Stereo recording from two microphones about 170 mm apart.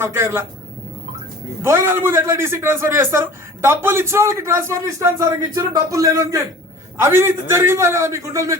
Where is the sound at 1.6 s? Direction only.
15° right (ahead or behind).